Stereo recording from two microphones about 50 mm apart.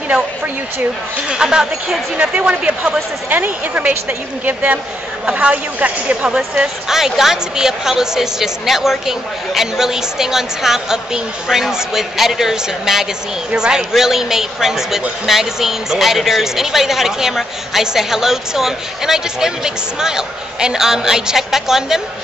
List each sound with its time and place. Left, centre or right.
1.3 s speech: centre
2.3 s speech: right
3.3 s speech: right
5.2 s speech: right